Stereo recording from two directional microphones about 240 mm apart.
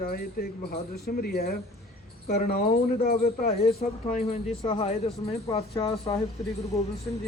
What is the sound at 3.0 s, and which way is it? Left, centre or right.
Speech, left.